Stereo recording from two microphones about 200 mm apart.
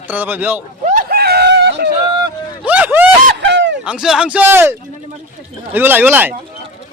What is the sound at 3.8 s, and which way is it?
A man's voice, 5° right (ahead or behind).